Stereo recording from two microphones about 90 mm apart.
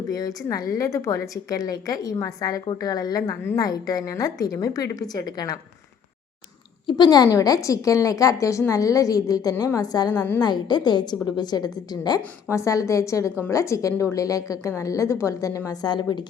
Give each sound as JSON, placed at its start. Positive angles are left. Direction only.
{"t": 0.1, "sound": "a woman's voice", "side_deg": 45}
{"t": 6.8, "sound": "a woman's voice", "side_deg": 55}
{"t": 7.3, "sound": "a woman's voice", "side_deg": 40}
{"t": 12.5, "sound": "a woman's voice", "side_deg": 35}